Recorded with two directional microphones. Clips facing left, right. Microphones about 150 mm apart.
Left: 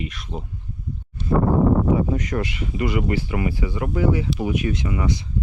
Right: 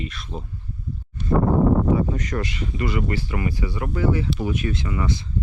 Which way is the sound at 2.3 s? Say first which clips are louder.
Left 2 dB; 15° left (ahead or behind).